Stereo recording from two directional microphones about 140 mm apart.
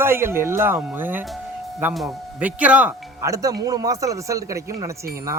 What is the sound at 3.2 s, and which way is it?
Speech, 25° right (ahead or behind).